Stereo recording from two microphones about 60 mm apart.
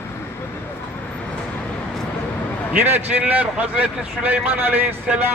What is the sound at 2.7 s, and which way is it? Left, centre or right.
Speech, right.